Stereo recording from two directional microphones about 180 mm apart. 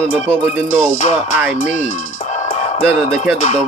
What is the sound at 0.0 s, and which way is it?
Speech, 5° left (ahead or behind).